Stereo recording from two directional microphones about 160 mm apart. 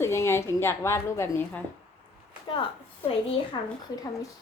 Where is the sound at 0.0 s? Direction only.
15° left (ahead or behind).